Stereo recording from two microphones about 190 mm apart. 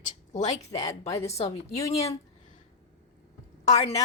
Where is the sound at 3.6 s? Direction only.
35° left (ahead or behind).